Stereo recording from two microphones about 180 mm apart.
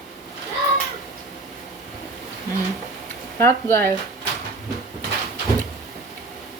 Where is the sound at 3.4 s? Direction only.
15° left (ahead or behind).